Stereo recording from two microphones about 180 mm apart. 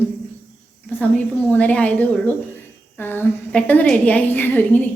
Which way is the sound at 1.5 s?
5° left (ahead or behind).